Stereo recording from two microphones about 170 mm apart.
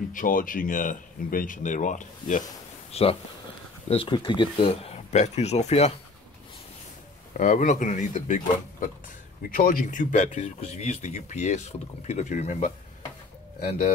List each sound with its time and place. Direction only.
0.1 s speech: 55° left (ahead or behind)
2.9 s speech: 35° left (ahead or behind)
7.3 s speech: 45° left (ahead or behind)